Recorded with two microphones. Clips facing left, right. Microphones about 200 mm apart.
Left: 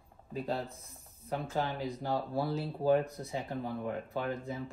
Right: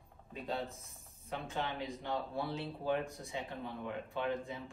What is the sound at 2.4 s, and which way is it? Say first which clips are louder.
Speech: left 5 dB; centre (ahead or behind).